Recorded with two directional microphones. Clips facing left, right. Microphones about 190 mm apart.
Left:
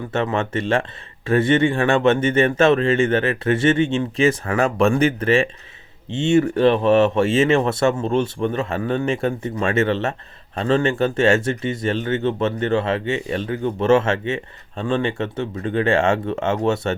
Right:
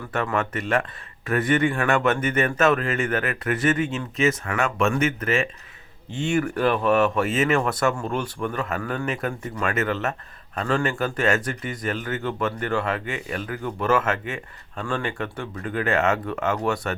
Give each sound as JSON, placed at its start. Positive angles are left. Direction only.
{"t": 0.1, "sound": "speech", "side_deg": 25}